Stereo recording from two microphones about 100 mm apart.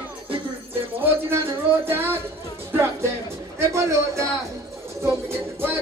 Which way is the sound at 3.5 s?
30° right (ahead or behind).